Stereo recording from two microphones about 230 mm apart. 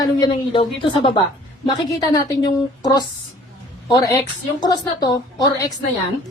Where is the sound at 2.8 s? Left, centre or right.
Centre.